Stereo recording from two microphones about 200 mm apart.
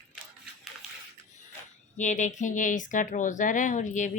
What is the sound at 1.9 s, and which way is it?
Speech, 40° left (ahead or behind).